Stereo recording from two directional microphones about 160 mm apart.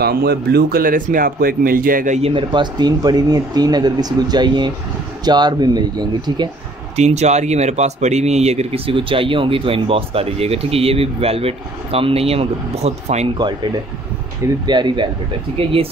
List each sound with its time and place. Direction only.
0.0 s speech: 80° right; by 6.5 s 25° right (ahead or behind)
7.0 s speech: 45° right (ahead or behind)
14.4 s speech: 30° right (ahead or behind)